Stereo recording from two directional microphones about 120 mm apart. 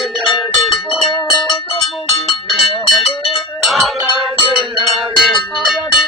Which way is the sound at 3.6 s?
Centre (ahead or behind).